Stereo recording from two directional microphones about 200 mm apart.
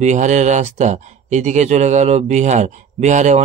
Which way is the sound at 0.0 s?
35° right (ahead or behind).